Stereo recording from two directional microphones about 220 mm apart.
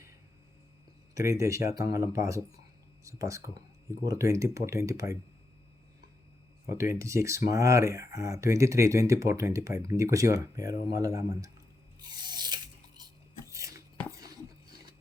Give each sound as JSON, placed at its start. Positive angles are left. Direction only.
{"t": 1.3, "sound": "speech", "side_deg": -15}
{"t": 6.7, "sound": "speech", "side_deg": -15}
{"t": 11.9, "sound": "filing", "side_deg": -20}
{"t": 13.5, "sound": "chopping", "side_deg": -15}